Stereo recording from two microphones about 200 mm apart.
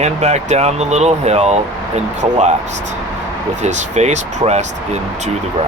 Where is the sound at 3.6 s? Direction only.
35° right (ahead or behind).